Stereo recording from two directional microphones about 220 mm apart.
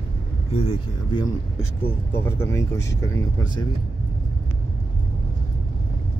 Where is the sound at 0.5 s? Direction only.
25° left (ahead or behind).